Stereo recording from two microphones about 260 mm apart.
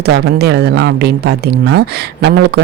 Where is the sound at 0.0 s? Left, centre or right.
Right.